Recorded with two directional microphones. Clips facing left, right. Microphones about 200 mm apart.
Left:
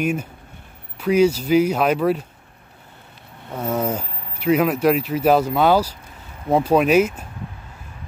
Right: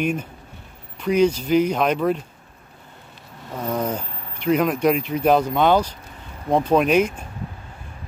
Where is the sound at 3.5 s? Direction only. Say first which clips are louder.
Left 2 dB; 5° left (ahead or behind).